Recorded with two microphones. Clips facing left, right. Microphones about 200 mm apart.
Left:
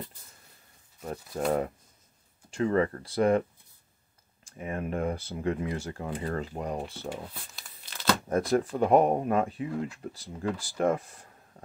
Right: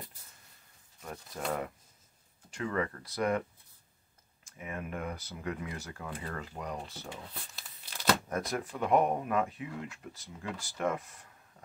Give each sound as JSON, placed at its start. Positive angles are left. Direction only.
{"t": 1.0, "sound": "speech", "side_deg": 35}
{"t": 4.5, "sound": "speech", "side_deg": 35}
{"t": 7.5, "sound": "crumpling", "side_deg": -10}
{"t": 8.3, "sound": "speech", "side_deg": 30}